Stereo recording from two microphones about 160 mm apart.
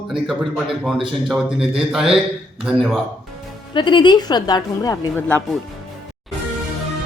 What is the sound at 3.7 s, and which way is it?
A woman's voice, 30° left (ahead or behind).